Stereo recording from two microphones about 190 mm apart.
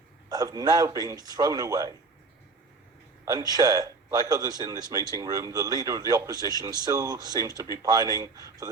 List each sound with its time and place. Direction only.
0.3 s speech: 20° right (ahead or behind)
3.2 s speech: 20° right (ahead or behind)